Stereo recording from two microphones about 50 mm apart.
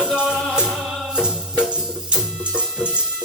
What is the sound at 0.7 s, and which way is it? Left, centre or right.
Music, centre.